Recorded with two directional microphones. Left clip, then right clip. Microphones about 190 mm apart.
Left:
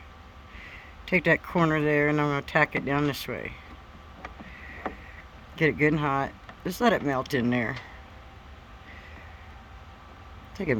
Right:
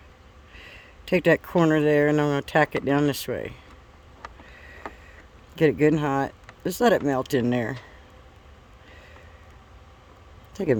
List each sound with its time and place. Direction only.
0.6 s speech: 50° right (ahead or behind)
5.5 s speech: 50° right (ahead or behind)
10.6 s speech: 50° right (ahead or behind)